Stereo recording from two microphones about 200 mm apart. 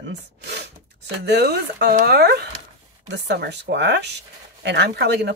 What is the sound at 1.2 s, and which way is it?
Speech, 55° right (ahead or behind).